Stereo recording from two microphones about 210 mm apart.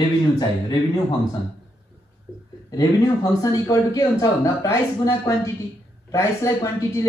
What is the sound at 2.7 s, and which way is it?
Speech, 15° left (ahead or behind).